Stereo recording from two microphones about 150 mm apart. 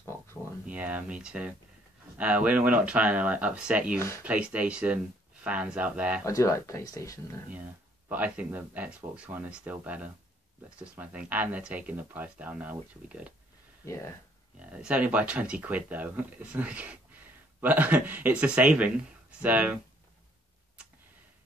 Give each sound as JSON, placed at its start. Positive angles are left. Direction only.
{"t": 0.7, "sound": "speech", "side_deg": -10}
{"t": 6.2, "sound": "speech", "side_deg": 20}
{"t": 8.1, "sound": "speech", "side_deg": -10}
{"t": 13.8, "sound": "speech", "side_deg": 20}
{"t": 14.6, "sound": "speech", "side_deg": -5}